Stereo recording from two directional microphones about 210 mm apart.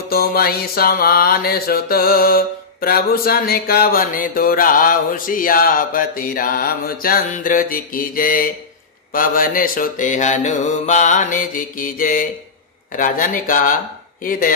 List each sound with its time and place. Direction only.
0.1 s music: 45° left (ahead or behind)
9.1 s mantra: 40° left (ahead or behind)